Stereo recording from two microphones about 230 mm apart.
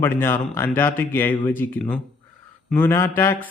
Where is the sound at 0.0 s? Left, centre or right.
Centre.